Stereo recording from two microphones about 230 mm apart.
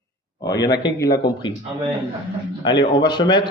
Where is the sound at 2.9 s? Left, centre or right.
Centre.